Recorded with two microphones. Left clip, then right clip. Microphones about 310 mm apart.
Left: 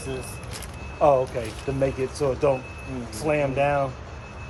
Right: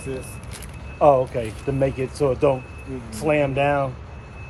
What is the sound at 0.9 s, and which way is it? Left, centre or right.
Speech, right.